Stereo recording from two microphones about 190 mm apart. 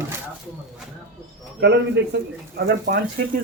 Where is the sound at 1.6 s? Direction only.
65° right (ahead or behind).